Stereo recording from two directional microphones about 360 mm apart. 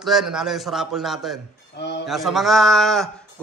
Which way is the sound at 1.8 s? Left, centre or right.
Left.